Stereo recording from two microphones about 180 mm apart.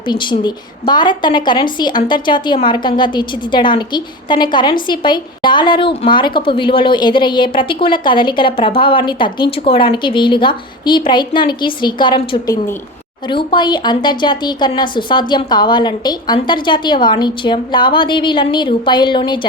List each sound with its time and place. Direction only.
0.1 s a woman's voice: 25° left (ahead or behind)